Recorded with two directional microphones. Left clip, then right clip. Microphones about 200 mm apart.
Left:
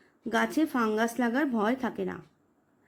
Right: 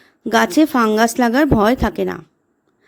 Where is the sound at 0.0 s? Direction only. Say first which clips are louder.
Right 13 dB; 40° right (ahead or behind).